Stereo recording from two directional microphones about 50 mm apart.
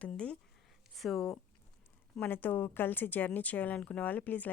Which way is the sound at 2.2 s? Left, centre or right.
Left.